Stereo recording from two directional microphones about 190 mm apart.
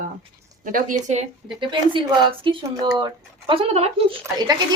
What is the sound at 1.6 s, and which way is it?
Speech, 25° right (ahead or behind).